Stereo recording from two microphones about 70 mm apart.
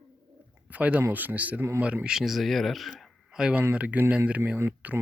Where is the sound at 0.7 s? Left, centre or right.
Right.